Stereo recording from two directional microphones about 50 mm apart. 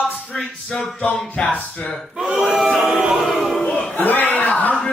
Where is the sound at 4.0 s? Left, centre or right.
Left.